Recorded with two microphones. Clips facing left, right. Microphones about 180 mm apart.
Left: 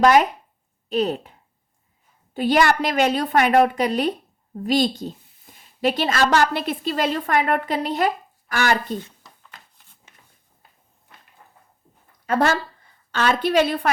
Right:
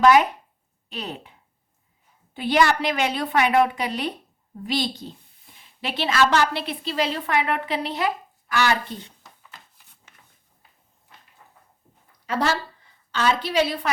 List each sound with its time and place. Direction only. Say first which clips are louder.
0.0 s a woman's voice: left 1 dB; 40° left (ahead or behind)
12.2 s a woman's voice: left 4 dB; 50° left (ahead or behind)